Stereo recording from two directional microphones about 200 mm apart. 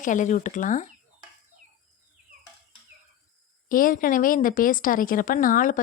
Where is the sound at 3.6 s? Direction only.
45° left (ahead or behind).